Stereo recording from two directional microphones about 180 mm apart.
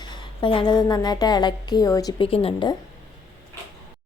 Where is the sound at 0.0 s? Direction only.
25° left (ahead or behind).